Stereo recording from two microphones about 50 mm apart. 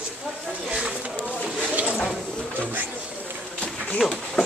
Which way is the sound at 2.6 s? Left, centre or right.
Right.